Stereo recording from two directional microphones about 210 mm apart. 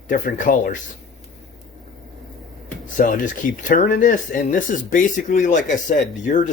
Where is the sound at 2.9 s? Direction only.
40° left (ahead or behind).